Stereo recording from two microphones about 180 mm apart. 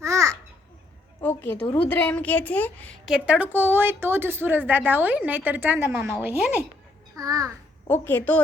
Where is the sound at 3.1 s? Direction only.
5° right (ahead or behind).